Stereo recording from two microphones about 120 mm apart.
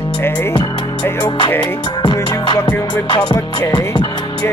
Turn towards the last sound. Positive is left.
turn(degrees=35)  # may be behind; listen again after turning